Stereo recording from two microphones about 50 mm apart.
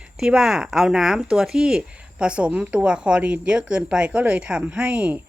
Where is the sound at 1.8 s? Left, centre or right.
Right.